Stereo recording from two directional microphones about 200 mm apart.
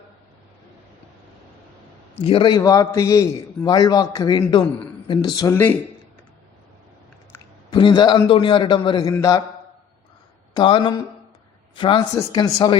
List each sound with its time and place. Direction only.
2.1 s a man's voice: 25° left (ahead or behind)
7.3 s a sound: 10° left (ahead or behind)
7.7 s a man's voice: 25° left (ahead or behind)
10.5 s a man's voice: 25° left (ahead or behind)